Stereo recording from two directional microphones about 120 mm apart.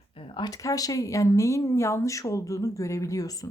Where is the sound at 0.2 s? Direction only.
50° left (ahead or behind).